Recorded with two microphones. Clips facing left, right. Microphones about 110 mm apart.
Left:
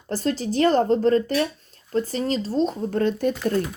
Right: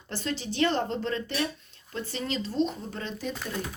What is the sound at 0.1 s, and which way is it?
Speech, 40° left (ahead or behind).